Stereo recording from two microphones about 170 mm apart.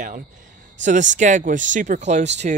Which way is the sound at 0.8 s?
45° right (ahead or behind).